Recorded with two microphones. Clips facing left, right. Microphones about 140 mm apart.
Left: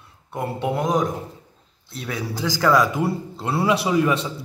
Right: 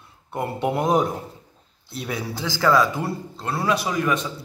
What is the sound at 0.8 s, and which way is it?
Speech, 25° right (ahead or behind).